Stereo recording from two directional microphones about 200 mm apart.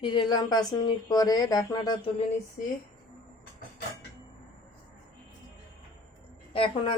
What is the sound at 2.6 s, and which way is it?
Speech, 40° left (ahead or behind).